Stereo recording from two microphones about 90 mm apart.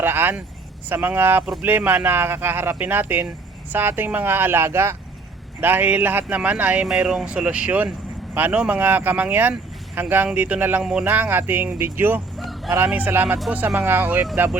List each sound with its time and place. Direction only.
0.0 s speech: 25° right (ahead or behind)
12.4 s a sound: centre (ahead or behind)
12.7 s speech: 20° right (ahead or behind)